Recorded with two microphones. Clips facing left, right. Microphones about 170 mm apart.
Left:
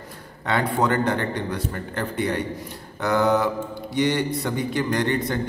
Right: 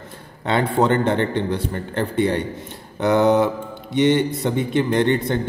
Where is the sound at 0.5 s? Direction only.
25° right (ahead or behind).